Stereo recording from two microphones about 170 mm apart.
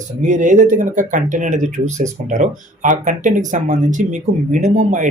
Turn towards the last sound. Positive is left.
turn(degrees=-45)  # may be behind; listen again after turning